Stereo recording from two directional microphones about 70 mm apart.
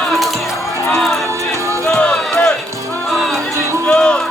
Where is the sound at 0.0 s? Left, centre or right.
Centre.